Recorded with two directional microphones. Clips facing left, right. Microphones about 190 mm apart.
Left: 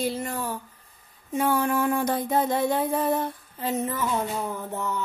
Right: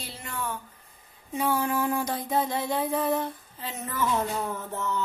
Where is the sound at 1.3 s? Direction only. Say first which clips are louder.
Left 3 dB; 55° left (ahead or behind).